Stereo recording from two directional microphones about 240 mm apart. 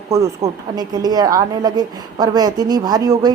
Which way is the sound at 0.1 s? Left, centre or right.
Centre.